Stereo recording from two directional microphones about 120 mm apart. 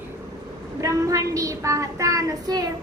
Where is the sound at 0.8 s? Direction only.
30° right (ahead or behind).